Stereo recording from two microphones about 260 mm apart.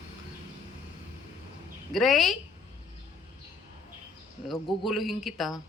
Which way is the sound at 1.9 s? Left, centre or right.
Centre.